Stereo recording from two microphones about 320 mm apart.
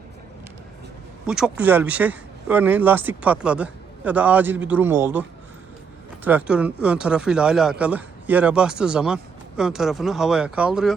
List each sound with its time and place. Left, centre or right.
1.3 s speech: centre
6.2 s speech: centre